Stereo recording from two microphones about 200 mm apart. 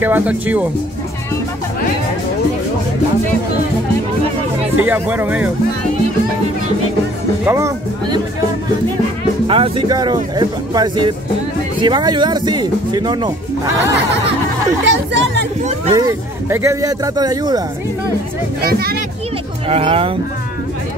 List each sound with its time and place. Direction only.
0.0 s speech: 10° right (ahead or behind)
4.7 s speech: 10° right (ahead or behind)
7.4 s speech: 15° right (ahead or behind)
9.5 s speech: 25° right (ahead or behind)
14.9 s speech: 65° right (ahead or behind)
15.9 s speech: 15° right (ahead or behind)
18.6 s speech: 50° right (ahead or behind)
19.7 s speech: 30° right (ahead or behind)